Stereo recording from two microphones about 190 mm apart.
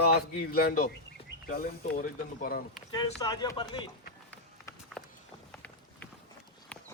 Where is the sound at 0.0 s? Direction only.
55° left (ahead or behind).